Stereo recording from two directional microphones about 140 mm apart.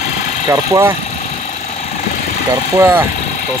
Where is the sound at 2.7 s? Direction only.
20° right (ahead or behind).